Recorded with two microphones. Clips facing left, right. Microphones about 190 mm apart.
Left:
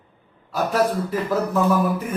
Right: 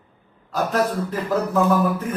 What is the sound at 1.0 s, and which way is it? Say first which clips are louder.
Speech: even; 10° left (ahead or behind).